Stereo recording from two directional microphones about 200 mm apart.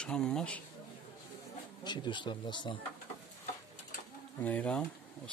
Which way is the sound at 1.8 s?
20° left (ahead or behind).